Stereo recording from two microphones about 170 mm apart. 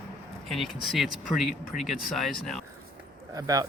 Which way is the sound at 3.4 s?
20° right (ahead or behind).